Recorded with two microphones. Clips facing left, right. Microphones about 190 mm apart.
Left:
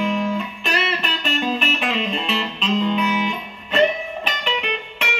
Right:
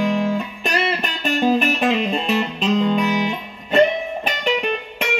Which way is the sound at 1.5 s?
45° right (ahead or behind).